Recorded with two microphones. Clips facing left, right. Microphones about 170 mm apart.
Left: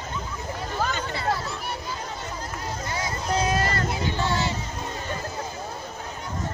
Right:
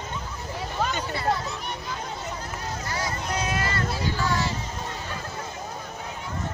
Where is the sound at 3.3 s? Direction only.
40° left (ahead or behind).